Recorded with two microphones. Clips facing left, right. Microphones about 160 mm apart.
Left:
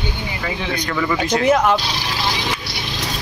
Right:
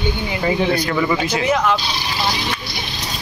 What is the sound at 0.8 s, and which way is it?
Speech, 10° right (ahead or behind).